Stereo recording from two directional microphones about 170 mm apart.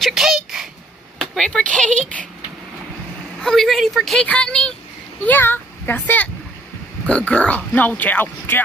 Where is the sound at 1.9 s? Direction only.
45° right (ahead or behind).